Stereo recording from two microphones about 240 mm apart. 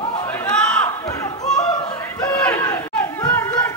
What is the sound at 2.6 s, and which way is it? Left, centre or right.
Chatter, centre.